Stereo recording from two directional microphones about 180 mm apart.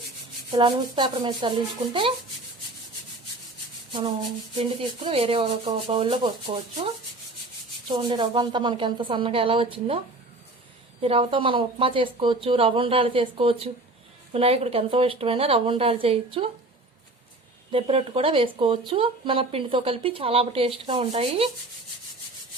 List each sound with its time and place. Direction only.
0.5 s speech: 25° right (ahead or behind)
4.5 s speech: 30° right (ahead or behind)
7.9 s speech: 25° right (ahead or behind)
11.0 s speech: 30° right (ahead or behind)
17.7 s speech: 30° right (ahead or behind)